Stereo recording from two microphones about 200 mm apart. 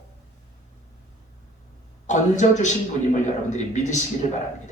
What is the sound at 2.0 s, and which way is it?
A man's voice, 35° left (ahead or behind).